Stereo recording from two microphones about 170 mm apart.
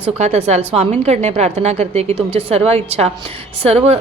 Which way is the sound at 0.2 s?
40° right (ahead or behind).